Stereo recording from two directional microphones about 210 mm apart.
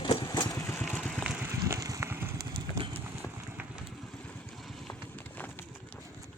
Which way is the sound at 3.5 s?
10° right (ahead or behind).